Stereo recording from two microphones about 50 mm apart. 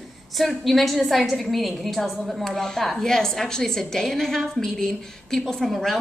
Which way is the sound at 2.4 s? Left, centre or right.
Centre.